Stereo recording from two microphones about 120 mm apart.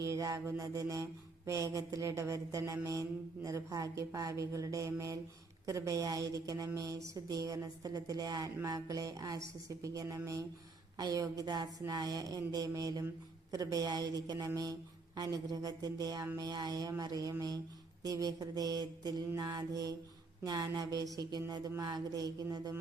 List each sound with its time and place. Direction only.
0.0 s a woman's voice: 25° right (ahead or behind)
19.3 s a woman's voice: 20° right (ahead or behind)